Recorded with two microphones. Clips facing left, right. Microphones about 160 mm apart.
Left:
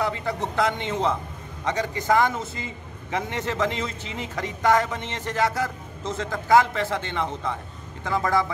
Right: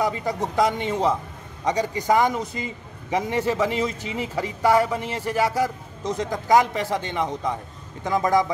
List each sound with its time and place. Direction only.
0.0 s a man's voice: 15° right (ahead or behind)